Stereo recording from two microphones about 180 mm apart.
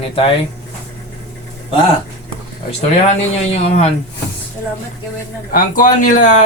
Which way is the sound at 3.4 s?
35° left (ahead or behind).